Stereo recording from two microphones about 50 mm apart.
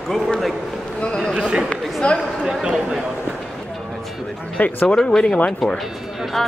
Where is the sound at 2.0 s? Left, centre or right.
Left.